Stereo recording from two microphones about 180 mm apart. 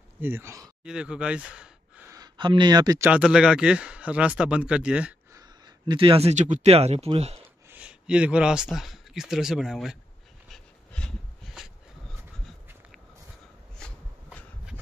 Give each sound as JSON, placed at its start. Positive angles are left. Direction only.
{"t": 0.2, "sound": "speech", "side_deg": -15}
{"t": 0.8, "sound": "speech", "side_deg": -5}
{"t": 2.0, "sound": "speech", "side_deg": -20}
{"t": 3.1, "sound": "speech", "side_deg": -5}
{"t": 5.3, "sound": "speech", "side_deg": -25}
{"t": 7.7, "sound": "speech", "side_deg": -5}
{"t": 10.5, "sound": "dog", "side_deg": 5}
{"t": 13.7, "sound": "shuffle", "side_deg": 5}